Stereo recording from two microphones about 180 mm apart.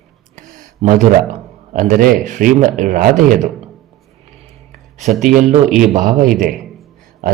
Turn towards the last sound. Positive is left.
turn(degrees=-45)  # may be behind; listen again after turning